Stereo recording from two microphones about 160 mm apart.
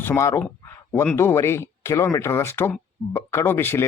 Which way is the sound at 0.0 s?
15° left (ahead or behind).